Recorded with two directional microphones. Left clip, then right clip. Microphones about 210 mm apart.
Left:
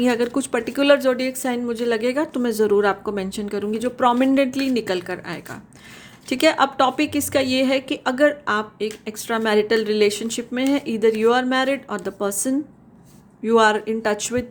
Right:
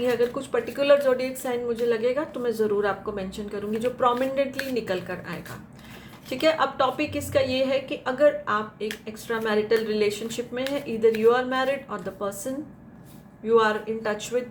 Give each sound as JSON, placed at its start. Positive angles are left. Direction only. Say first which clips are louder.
{"t": 0.0, "sound": "a woman's voice", "louder": "left 3 dB", "side_deg": 50}